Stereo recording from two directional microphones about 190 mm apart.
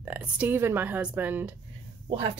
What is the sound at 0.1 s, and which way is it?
A woman's voice, 10° right (ahead or behind).